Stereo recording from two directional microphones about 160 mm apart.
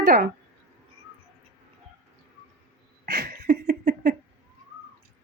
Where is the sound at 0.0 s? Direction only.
65° right (ahead or behind).